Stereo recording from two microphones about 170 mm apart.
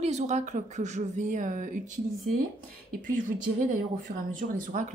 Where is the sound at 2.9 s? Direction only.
50° right (ahead or behind).